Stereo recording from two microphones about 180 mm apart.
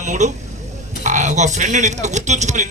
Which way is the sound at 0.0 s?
40° right (ahead or behind).